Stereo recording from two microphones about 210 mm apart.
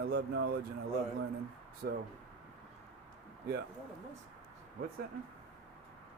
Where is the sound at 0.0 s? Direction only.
50° right (ahead or behind).